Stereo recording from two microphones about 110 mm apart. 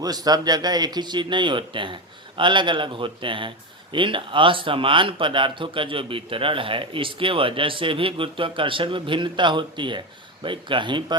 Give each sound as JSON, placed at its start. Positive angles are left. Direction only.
{"t": 0.0, "sound": "speech", "side_deg": -35}